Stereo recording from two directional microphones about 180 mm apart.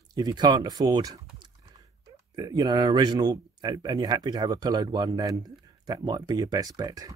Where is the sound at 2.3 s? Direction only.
20° right (ahead or behind).